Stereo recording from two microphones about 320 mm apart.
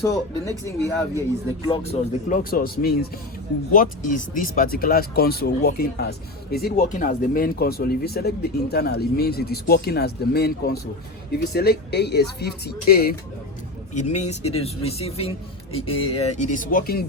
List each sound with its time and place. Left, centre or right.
0.0 s speech: centre
1.6 s speech: centre